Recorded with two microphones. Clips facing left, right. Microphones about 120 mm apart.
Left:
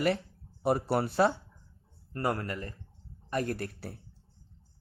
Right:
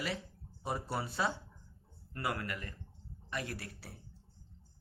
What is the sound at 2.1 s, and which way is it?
A man's voice, 40° left (ahead or behind).